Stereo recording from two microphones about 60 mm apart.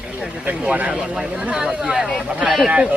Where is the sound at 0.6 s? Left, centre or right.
Right.